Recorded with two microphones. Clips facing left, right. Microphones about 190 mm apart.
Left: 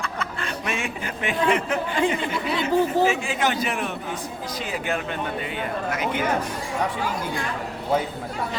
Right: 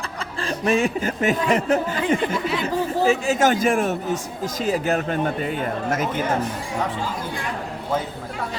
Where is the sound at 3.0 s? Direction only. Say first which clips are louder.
Right 4 dB; 40° right (ahead or behind).